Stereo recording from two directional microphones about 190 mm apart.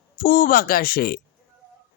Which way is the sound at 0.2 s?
50° left (ahead or behind).